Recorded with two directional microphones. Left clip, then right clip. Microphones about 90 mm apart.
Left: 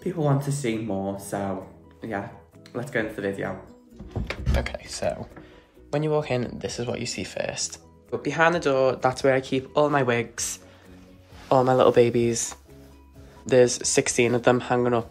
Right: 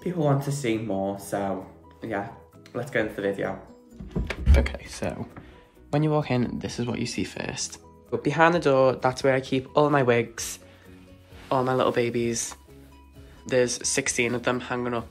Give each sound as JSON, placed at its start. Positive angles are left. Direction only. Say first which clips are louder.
{"t": 0.0, "sound": "speech", "louder": "even", "side_deg": -10}
{"t": 4.7, "sound": "speech", "louder": "left 4 dB", "side_deg": 20}
{"t": 8.1, "sound": "speech", "louder": "right 1 dB", "side_deg": 10}
{"t": 9.0, "sound": "speech", "louder": "left 1 dB", "side_deg": 30}
{"t": 9.7, "sound": "speech", "louder": "right 1 dB", "side_deg": 15}
{"t": 11.4, "sound": "speech", "louder": "left 5 dB", "side_deg": 40}